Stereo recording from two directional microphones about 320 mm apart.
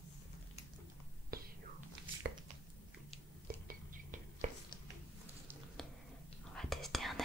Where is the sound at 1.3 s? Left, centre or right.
Right.